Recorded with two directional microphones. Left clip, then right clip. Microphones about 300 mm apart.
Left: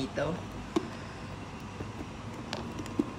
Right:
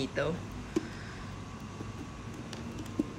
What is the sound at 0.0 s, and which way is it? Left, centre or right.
Speech, centre.